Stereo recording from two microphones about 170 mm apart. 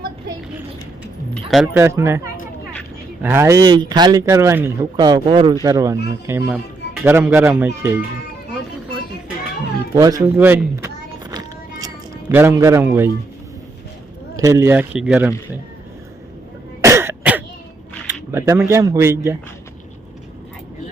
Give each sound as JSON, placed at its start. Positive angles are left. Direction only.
{"t": 1.3, "sound": "a sound", "side_deg": 0}
{"t": 1.7, "sound": "speech", "side_deg": -15}
{"t": 3.2, "sound": "speech", "side_deg": -15}
{"t": 4.9, "sound": "speech", "side_deg": -25}
{"t": 9.9, "sound": "a sound", "side_deg": -20}
{"t": 12.3, "sound": "speech", "side_deg": -15}
{"t": 14.3, "sound": "speech", "side_deg": -20}
{"t": 16.8, "sound": "cough", "side_deg": -15}
{"t": 18.3, "sound": "speech", "side_deg": -15}